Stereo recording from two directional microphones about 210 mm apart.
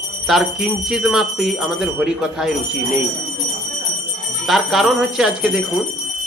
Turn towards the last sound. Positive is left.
turn(degrees=0)  # may be behind; listen again after turning